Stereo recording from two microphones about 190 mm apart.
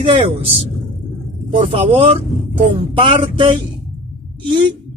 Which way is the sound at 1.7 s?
30° right (ahead or behind).